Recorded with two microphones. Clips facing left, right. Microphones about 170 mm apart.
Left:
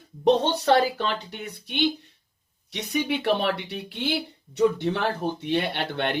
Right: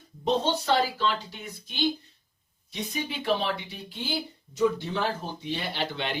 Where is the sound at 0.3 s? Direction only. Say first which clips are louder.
Left 5 dB; 65° left (ahead or behind).